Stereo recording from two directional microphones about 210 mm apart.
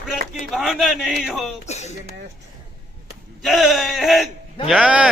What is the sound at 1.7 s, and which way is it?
Speech, 30° left (ahead or behind).